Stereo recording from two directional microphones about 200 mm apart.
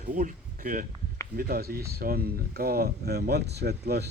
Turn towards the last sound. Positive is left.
turn(degrees=-55)  # may be behind; listen again after turning